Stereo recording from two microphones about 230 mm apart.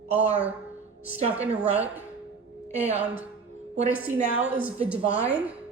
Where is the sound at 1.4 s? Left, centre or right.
Centre.